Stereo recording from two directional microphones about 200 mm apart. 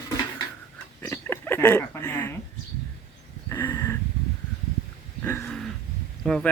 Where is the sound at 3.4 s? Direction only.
15° left (ahead or behind).